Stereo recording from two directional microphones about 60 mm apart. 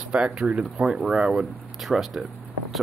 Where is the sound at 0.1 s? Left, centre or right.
Centre.